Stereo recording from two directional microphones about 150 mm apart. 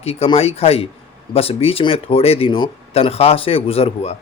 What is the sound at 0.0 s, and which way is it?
Speech, 40° left (ahead or behind).